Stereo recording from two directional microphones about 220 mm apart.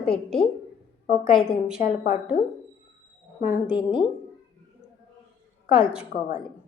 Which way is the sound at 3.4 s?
10° right (ahead or behind).